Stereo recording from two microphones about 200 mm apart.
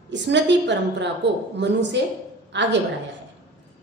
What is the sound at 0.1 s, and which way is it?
A woman's voice, 60° right (ahead or behind).